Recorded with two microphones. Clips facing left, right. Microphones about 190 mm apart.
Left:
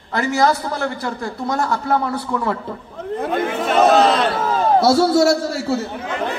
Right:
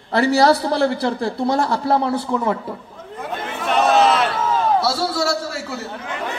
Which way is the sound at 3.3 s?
50° left (ahead or behind).